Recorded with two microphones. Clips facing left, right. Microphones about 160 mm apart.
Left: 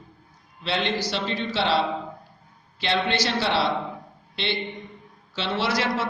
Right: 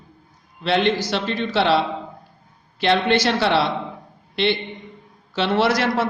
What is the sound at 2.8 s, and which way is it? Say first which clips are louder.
Speech: right 6 dB; 55° right (ahead or behind).